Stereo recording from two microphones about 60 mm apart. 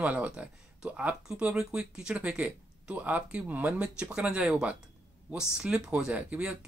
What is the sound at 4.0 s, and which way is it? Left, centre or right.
Speech, centre.